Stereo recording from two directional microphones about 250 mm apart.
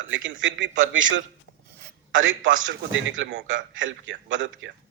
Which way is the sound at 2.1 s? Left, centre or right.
Right.